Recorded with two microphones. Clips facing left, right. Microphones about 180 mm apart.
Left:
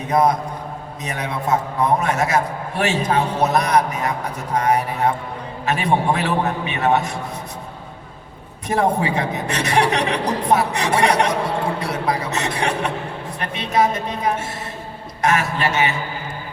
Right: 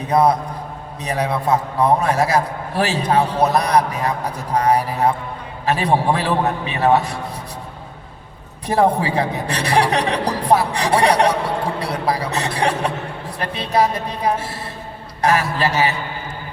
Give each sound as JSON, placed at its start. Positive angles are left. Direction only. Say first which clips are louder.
{"t": 0.1, "sound": "a man's voice", "louder": "right 2 dB", "side_deg": -35}
{"t": 8.6, "sound": "a man's voice", "louder": "right 2 dB", "side_deg": -35}
{"t": 11.8, "sound": "music", "louder": "right 1 dB", "side_deg": -35}
{"t": 13.4, "sound": "a man's voice", "louder": "right 1 dB", "side_deg": -35}